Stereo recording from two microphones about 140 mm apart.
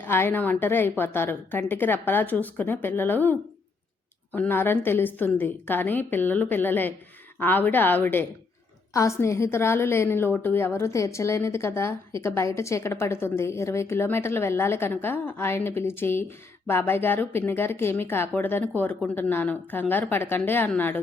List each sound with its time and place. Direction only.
0.0 s a woman's voice: 15° left (ahead or behind)
4.4 s a woman's voice: 15° left (ahead or behind)